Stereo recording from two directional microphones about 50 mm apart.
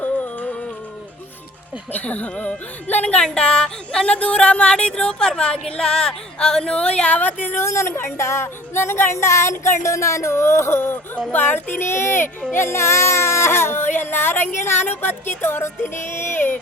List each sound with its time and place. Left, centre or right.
0.0 s music: left
1.9 s speech: left
3.2 s speech: centre; by 7.6 s left
7.6 s music: left
11.3 s speech: left
11.9 s music: left
12.5 s a sound: left